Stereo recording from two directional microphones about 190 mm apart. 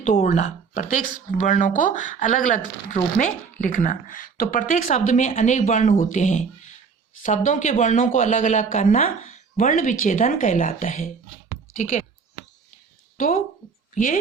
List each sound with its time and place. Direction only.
0.0 s speech: 40° left (ahead or behind)
13.1 s a woman's voice: 45° left (ahead or behind)